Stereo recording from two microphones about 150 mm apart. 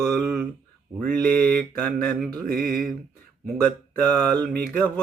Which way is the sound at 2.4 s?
85° right.